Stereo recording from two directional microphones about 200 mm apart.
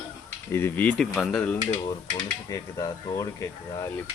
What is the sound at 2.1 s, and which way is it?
Speech, 20° left (ahead or behind).